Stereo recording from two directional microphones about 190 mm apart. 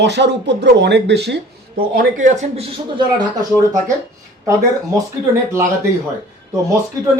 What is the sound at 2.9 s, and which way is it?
Speech, 20° right (ahead or behind).